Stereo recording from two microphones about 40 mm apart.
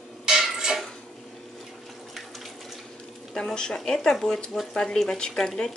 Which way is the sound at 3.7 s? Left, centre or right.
Centre.